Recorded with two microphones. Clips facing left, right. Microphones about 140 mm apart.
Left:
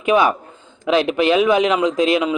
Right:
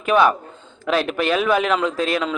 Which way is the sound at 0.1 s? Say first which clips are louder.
Left 1 dB; 15° left (ahead or behind).